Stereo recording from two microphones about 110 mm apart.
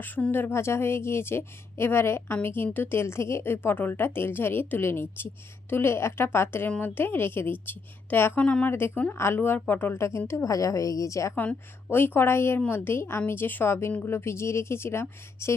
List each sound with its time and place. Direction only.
0.0 s a woman's voice: 15° left (ahead or behind)